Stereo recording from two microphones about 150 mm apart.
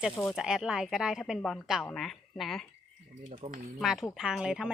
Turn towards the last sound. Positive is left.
turn(degrees=-5)  # may be behind; listen again after turning